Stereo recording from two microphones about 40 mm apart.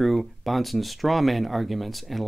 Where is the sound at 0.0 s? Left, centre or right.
Centre.